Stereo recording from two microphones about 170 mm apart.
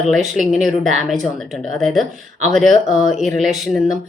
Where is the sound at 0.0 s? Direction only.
Centre (ahead or behind).